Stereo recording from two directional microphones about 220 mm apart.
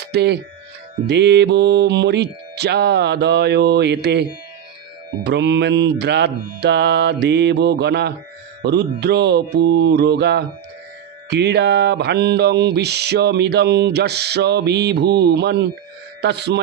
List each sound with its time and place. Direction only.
0.0 s speech: 50° right (ahead or behind)